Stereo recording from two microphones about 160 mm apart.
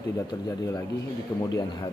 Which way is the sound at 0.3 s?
20° left (ahead or behind).